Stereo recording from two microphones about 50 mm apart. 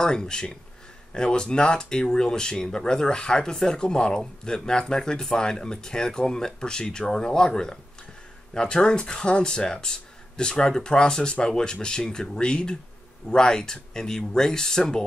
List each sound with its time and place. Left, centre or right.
0.0 s speech: centre